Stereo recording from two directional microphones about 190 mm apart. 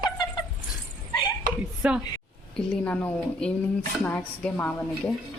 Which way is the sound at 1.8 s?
5° right (ahead or behind).